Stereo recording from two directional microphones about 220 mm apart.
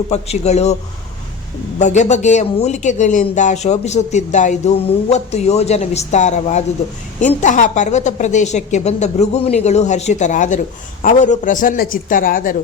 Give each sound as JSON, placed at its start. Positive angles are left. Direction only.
{"t": 0.1, "sound": "speech", "side_deg": 30}
{"t": 1.8, "sound": "speech", "side_deg": 30}